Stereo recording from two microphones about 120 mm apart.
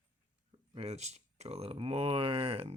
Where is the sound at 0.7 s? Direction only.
65° right (ahead or behind).